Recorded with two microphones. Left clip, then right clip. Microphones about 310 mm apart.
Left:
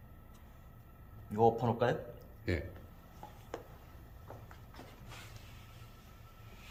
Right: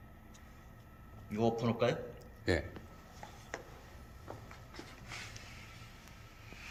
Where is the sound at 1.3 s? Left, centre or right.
Left.